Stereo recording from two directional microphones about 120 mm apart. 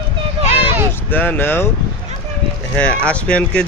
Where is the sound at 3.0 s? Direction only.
10° left (ahead or behind).